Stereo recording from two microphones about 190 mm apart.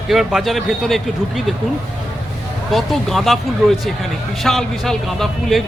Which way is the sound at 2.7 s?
Centre (ahead or behind).